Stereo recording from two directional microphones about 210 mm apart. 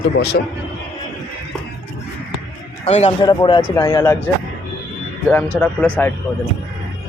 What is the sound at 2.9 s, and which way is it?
Speech, 30° left (ahead or behind).